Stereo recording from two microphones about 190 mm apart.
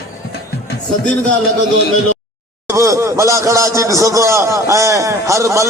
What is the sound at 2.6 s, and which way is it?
A man's voice, 15° right (ahead or behind).